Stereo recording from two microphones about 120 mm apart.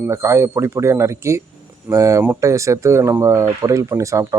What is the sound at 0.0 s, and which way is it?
Speech, 25° right (ahead or behind).